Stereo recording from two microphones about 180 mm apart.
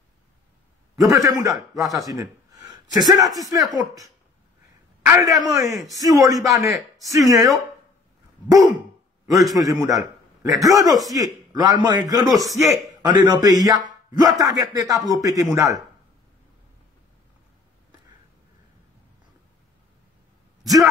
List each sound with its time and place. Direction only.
0.9 s a man's voice: 20° right (ahead or behind)
9.3 s a man's voice: 20° right (ahead or behind)
20.6 s speech: 20° right (ahead or behind)